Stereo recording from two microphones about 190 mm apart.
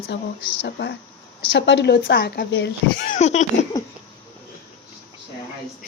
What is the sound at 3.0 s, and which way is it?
Speech, 40° left (ahead or behind).